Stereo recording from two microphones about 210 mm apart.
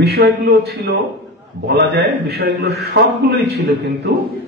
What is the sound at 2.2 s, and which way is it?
A man's voice, 50° right (ahead or behind).